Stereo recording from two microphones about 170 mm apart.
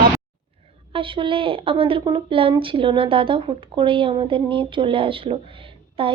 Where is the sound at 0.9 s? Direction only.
30° right (ahead or behind).